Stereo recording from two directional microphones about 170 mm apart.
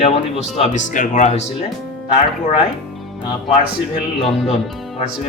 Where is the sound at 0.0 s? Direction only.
40° left (ahead or behind).